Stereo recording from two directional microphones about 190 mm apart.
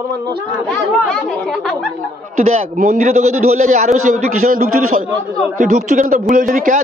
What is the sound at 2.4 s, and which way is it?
A man's voice, 45° right (ahead or behind).